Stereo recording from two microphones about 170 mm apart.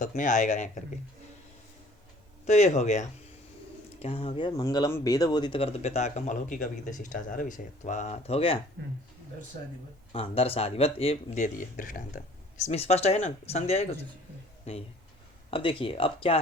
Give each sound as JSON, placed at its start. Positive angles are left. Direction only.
{"t": 0.2, "sound": "speech", "side_deg": 50}
{"t": 2.5, "sound": "speech", "side_deg": 40}
{"t": 10.1, "sound": "speech", "side_deg": 35}
{"t": 12.6, "sound": "speech", "side_deg": 40}